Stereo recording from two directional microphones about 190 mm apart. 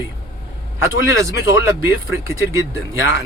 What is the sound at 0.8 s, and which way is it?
Speech, 15° right (ahead or behind).